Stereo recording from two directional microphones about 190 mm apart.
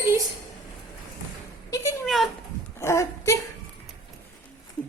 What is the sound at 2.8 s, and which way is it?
Speech, 15° left (ahead or behind).